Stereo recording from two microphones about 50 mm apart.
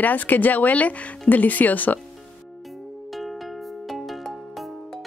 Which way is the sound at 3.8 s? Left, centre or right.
Centre.